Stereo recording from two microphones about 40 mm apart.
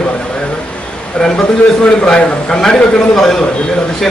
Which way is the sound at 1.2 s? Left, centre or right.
Left.